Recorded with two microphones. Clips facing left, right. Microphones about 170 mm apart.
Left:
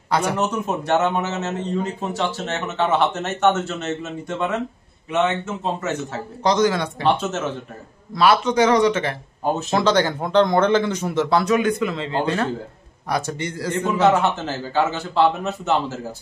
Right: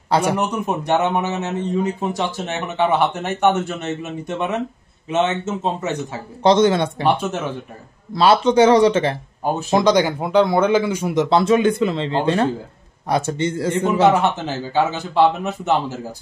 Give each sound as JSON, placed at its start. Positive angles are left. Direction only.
{"t": 0.4, "sound": "speech", "side_deg": -15}
{"t": 7.0, "sound": "speech", "side_deg": -10}
{"t": 8.1, "sound": "speech", "side_deg": -30}
{"t": 9.4, "sound": "speech", "side_deg": -10}
{"t": 11.2, "sound": "speech", "side_deg": -25}